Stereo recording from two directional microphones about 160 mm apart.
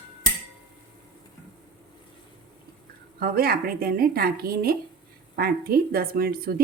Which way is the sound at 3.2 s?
70° right (ahead or behind).